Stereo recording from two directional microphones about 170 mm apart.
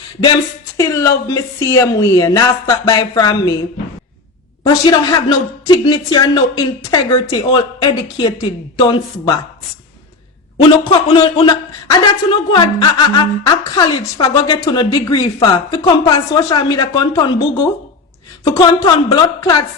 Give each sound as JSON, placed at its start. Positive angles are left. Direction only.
{"t": 0.8, "sound": "a man's voice", "side_deg": 20}
{"t": 4.6, "sound": "a man's voice", "side_deg": 25}
{"t": 10.6, "sound": "a man's voice", "side_deg": 30}